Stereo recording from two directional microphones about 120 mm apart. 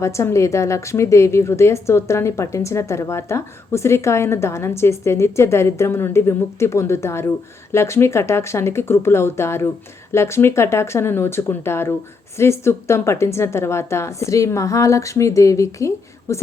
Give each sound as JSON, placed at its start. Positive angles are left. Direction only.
{"t": 0.0, "sound": "a woman's voice", "side_deg": 25}